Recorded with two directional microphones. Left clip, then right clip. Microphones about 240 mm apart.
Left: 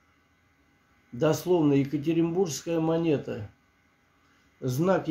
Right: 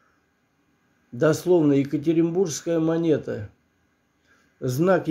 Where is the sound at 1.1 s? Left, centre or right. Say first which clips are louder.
Right 5 dB; centre.